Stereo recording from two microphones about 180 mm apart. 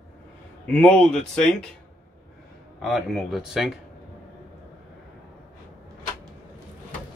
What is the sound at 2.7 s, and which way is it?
Speech, centre (ahead or behind).